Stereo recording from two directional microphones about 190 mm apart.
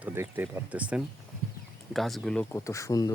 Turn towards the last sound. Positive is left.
turn(degrees=20)  # may be behind; listen again after turning